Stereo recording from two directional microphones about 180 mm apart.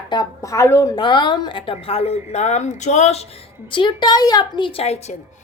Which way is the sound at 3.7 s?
25° left (ahead or behind).